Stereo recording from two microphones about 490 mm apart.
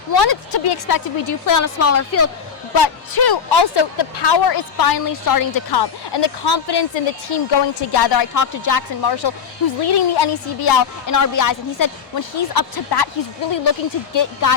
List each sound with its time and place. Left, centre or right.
0.2 s a woman's voice: left
2.7 s a woman's voice: left